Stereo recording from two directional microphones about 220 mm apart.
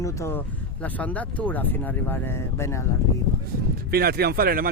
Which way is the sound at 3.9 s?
45° right (ahead or behind).